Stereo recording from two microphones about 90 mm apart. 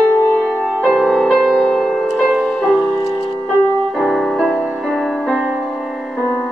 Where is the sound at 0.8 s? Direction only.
Centre (ahead or behind).